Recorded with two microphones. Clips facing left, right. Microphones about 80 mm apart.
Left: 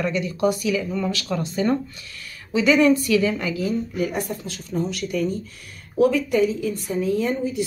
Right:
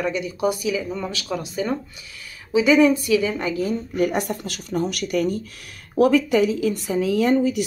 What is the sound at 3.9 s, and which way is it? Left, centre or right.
A woman's voice, right.